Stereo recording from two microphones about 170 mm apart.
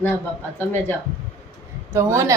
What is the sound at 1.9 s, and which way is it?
Speech, 15° right (ahead or behind).